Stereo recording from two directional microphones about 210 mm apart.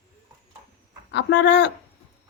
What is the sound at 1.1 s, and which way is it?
Speech, 55° left (ahead or behind).